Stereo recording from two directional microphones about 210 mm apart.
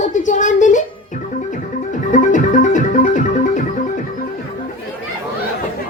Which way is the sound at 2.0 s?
35° left (ahead or behind).